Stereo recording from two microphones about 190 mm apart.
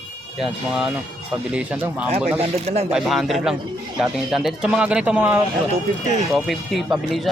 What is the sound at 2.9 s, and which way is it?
Speech, centre (ahead or behind).